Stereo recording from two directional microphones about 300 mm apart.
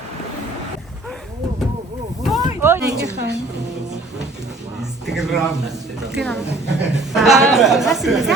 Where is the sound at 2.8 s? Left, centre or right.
Right.